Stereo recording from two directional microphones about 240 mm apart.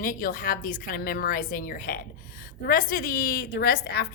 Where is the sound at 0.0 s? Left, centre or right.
Left.